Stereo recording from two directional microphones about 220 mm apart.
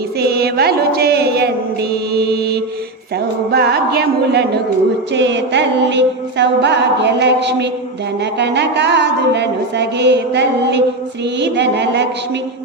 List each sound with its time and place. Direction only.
0.2 s music: 45° right (ahead or behind)